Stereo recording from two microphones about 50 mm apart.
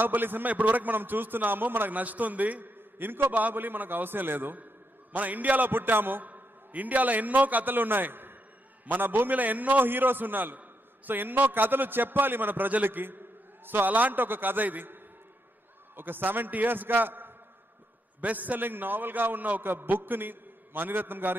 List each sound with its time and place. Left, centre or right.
0.0 s a man's voice: right
16.0 s a man's voice: right